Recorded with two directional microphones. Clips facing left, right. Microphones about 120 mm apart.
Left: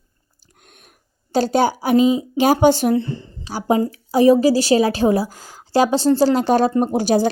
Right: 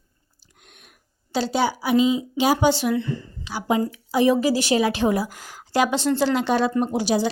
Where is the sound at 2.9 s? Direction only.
30° left (ahead or behind); by 7.3 s 45° left (ahead or behind).